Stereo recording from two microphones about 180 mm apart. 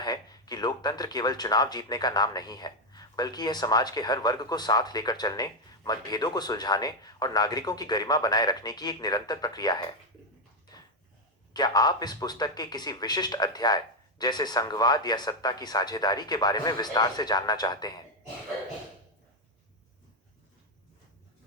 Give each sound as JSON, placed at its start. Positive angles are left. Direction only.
{"t": 0.0, "sound": "speech", "side_deg": 20}
{"t": 11.5, "sound": "speech", "side_deg": 20}